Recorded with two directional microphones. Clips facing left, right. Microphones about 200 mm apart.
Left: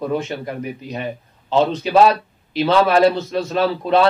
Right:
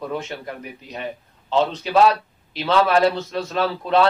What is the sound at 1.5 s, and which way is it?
A man's voice, 10° left (ahead or behind).